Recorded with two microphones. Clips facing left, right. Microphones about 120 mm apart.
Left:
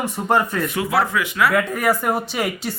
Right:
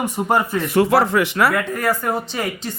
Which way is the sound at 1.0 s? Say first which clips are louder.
Right 3 dB; 35° right (ahead or behind).